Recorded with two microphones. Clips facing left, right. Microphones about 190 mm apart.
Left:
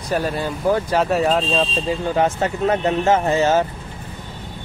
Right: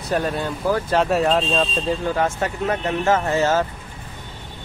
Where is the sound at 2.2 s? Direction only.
20° left (ahead or behind).